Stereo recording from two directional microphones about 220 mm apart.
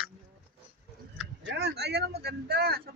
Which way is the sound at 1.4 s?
50° right (ahead or behind).